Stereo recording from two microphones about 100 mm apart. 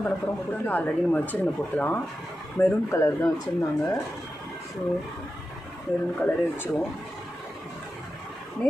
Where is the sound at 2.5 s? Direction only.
25° left (ahead or behind).